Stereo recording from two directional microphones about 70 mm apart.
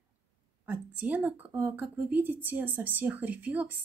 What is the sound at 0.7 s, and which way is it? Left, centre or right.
Speech, right.